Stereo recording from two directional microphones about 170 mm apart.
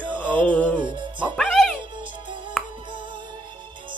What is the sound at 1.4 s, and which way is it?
Music, centre (ahead or behind).